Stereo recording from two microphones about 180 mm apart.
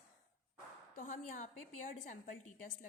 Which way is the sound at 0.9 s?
45° left (ahead or behind).